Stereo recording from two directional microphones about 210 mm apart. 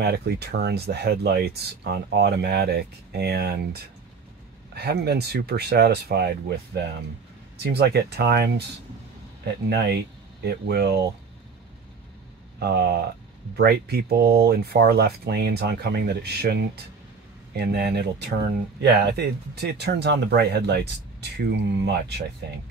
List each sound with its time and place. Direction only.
0.0 s speech: 50° right (ahead or behind)
4.7 s speech: 50° right (ahead or behind)
10.4 s speech: 50° right (ahead or behind)
12.5 s speech: 50° right (ahead or behind)
17.7 s speech: 50° right (ahead or behind)